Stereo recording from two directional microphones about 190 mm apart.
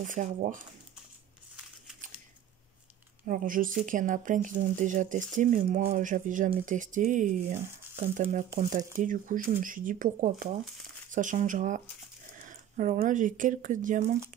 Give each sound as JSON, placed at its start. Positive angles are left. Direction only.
{"t": 0.0, "sound": "speech", "side_deg": -40}
{"t": 3.3, "sound": "speech", "side_deg": -45}